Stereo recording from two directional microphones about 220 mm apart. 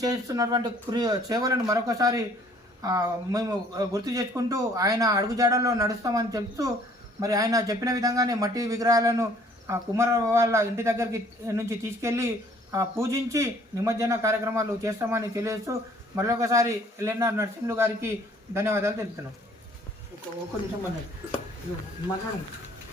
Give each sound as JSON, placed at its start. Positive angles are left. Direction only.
{"t": 0.0, "sound": "speech", "side_deg": -15}